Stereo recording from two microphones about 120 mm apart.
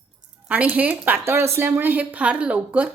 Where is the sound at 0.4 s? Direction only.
10° right (ahead or behind).